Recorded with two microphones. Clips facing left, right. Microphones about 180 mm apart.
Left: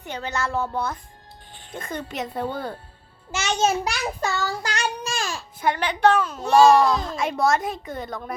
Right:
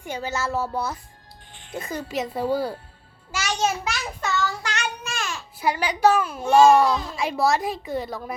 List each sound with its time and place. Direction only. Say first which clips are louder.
0.0 s a child's voice: even; 10° right (ahead or behind)
3.3 s child singing: left 3 dB; 25° left (ahead or behind)
5.5 s a child's voice: even; 5° right (ahead or behind)